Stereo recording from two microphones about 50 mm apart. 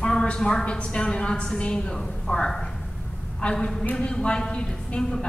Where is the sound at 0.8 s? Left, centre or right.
Centre.